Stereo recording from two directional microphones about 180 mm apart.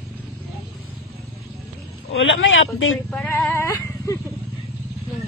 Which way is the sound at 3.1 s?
10° left (ahead or behind).